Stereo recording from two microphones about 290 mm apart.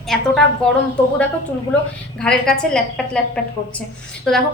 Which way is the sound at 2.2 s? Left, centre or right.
Centre.